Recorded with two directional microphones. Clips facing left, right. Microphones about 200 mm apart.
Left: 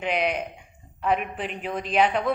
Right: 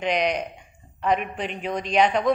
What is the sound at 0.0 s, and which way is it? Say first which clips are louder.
A woman's voice: right 2 dB; 5° left (ahead or behind).